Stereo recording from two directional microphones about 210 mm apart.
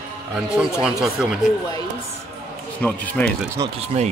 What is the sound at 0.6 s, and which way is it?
Speech, 5° right (ahead or behind).